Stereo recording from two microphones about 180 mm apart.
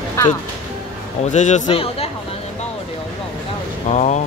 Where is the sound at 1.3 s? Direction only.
40° left (ahead or behind).